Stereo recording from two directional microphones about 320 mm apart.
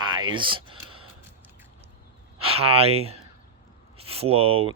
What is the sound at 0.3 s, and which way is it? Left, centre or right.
Speech, centre.